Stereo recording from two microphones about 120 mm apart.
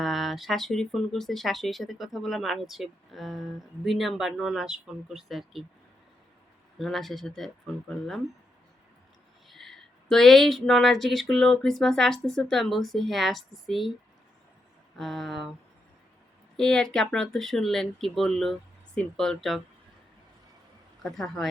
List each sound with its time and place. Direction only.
0.0 s speech: centre (ahead or behind)
6.7 s speech: centre (ahead or behind)
9.5 s speech: centre (ahead or behind)
14.9 s speech: centre (ahead or behind)
16.6 s speech: 5° left (ahead or behind)
21.0 s speech: centre (ahead or behind)